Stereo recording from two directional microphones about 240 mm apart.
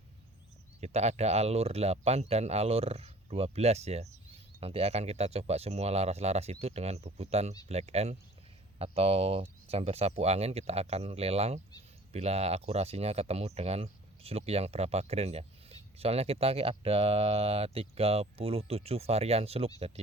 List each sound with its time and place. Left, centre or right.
0.8 s speech: right